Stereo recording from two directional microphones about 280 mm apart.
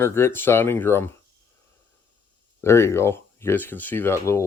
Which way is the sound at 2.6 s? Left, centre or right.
Centre.